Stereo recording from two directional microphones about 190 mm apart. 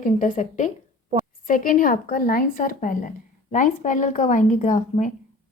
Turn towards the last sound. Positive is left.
turn(degrees=40)  # may be behind; listen again after turning